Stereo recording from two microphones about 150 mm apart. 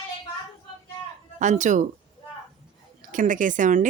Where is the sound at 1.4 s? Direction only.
55° right (ahead or behind).